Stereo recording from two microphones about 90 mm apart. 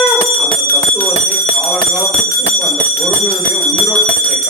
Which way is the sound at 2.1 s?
15° left (ahead or behind).